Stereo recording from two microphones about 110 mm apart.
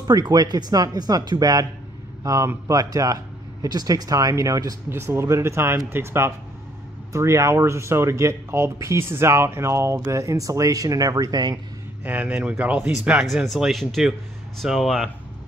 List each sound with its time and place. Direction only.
0.0 s speech: 35° right (ahead or behind)
12.0 s speech: 15° right (ahead or behind)